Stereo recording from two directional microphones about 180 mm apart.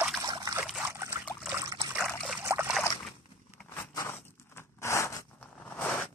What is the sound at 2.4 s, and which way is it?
Trickle, 15° right (ahead or behind).